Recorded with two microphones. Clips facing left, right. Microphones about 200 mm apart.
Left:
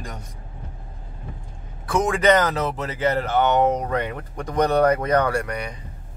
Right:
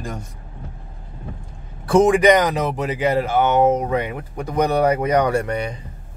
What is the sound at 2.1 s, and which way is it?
Speech, 15° right (ahead or behind).